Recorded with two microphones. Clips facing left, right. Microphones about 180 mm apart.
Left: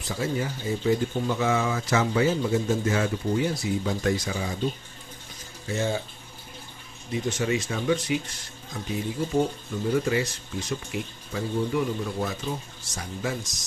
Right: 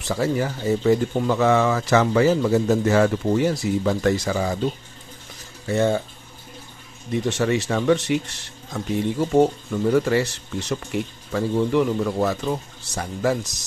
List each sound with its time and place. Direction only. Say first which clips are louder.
0.1 s speech: right 6 dB; 65° right (ahead or behind)
5.7 s speech: right 7 dB; 55° right (ahead or behind)
7.1 s speech: right 5 dB; 65° right (ahead or behind)